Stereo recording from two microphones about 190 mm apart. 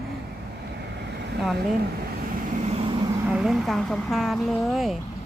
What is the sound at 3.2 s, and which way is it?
A woman's voice, 5° right (ahead or behind).